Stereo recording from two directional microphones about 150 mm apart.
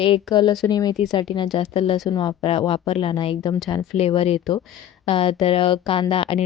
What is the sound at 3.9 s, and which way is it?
Speech, 40° left (ahead or behind).